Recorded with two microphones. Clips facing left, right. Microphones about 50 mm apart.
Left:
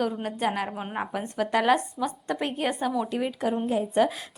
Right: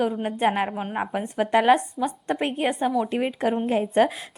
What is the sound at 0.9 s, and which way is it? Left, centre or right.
A woman's voice, centre.